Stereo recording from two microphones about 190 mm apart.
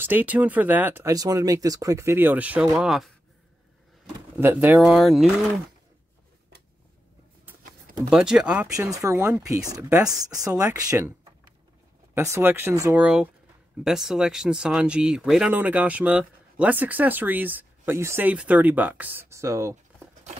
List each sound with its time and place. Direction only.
0.0 s speech: 10° right (ahead or behind)
4.4 s speech: 10° right (ahead or behind)
8.1 s speech: 5° right (ahead or behind)
8.7 s speech: 15° right (ahead or behind)